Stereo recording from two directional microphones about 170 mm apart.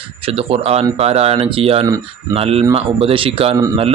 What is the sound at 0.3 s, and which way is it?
Speech, 35° right (ahead or behind).